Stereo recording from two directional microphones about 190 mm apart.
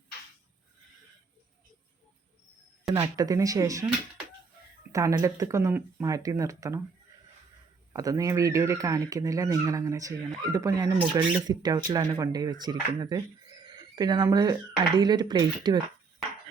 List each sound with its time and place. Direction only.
2.9 s speech: 20° right (ahead or behind)
4.9 s speech: 15° right (ahead or behind)
7.9 s speech: 20° right (ahead or behind)